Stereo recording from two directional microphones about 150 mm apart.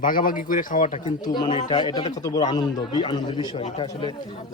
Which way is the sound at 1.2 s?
30° left (ahead or behind).